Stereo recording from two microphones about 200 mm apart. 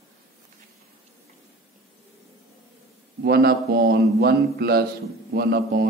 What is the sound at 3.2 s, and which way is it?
A man's voice, 50° right (ahead or behind).